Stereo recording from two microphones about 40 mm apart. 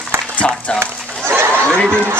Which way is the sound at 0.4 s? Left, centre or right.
Left.